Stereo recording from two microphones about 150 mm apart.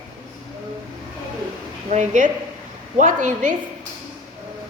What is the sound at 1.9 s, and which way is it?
A woman's voice, 55° right (ahead or behind).